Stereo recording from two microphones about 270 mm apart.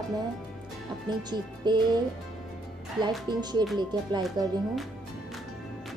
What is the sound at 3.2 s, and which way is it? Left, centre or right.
A woman's voice, centre.